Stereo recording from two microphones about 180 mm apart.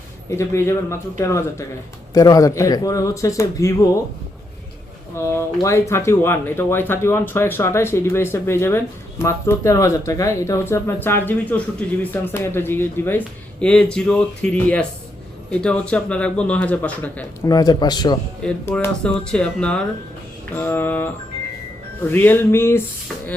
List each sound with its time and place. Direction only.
0.3 s speech: 15° left (ahead or behind)
5.1 s speech: 15° left (ahead or behind)
17.4 s speech: 20° left (ahead or behind)
18.4 s speech: 10° left (ahead or behind)